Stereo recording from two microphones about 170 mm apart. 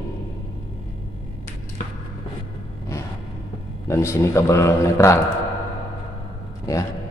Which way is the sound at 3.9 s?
15° left (ahead or behind).